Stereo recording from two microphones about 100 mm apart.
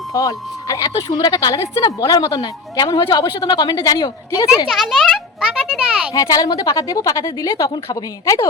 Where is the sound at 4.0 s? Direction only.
50° left (ahead or behind).